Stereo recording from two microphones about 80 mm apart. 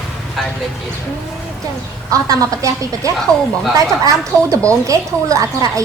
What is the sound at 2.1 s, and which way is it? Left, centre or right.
A woman's voice, right.